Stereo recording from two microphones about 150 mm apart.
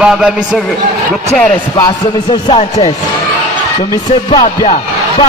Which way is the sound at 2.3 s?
40° left (ahead or behind).